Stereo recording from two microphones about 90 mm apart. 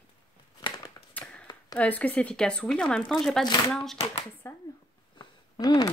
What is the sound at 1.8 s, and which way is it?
Speech, 15° left (ahead or behind).